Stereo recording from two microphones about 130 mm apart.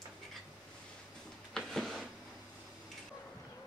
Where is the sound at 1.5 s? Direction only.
5° left (ahead or behind).